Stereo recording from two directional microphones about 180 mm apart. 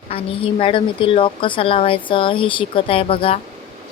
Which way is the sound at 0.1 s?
30° left (ahead or behind).